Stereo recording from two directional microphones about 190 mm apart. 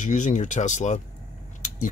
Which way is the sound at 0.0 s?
40° left (ahead or behind).